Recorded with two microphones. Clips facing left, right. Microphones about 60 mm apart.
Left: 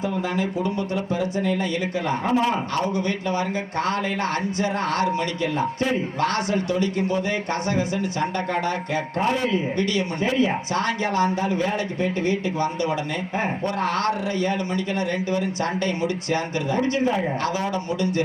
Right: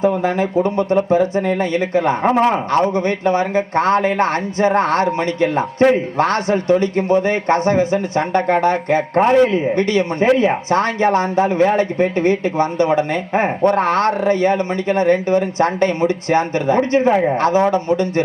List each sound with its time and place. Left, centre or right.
0.0 s speech: right